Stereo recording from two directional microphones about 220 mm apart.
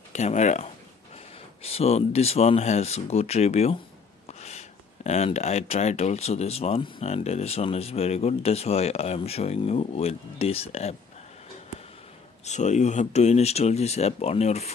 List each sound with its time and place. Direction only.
0.1 s speech: 30° left (ahead or behind)
12.4 s speech: 30° left (ahead or behind)